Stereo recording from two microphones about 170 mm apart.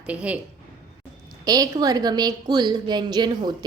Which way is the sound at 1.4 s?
20° right (ahead or behind).